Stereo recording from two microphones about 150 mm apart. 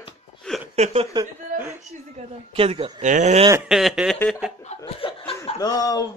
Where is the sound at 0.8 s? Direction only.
45° right (ahead or behind).